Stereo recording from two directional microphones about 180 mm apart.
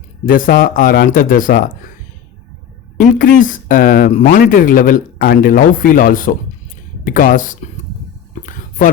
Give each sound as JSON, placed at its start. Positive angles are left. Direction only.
{"t": 0.3, "sound": "speech", "side_deg": 50}
{"t": 3.0, "sound": "speech", "side_deg": 50}